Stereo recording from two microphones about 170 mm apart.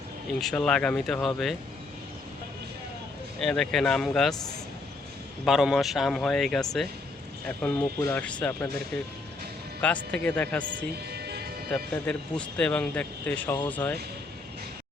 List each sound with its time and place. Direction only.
0.3 s speech: 5° left (ahead or behind)
3.4 s speech: 5° left (ahead or behind)
5.5 s a man's voice: centre (ahead or behind)
9.8 s a man's voice: 10° left (ahead or behind)
11.1 s music: 70° right (ahead or behind)
11.7 s a man's voice: 5° left (ahead or behind)